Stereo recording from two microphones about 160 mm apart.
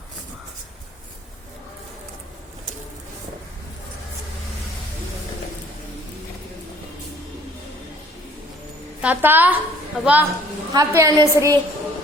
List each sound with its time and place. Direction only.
9.0 s a woman's voice: 10° right (ahead or behind)
10.8 s a woman's voice: 20° right (ahead or behind)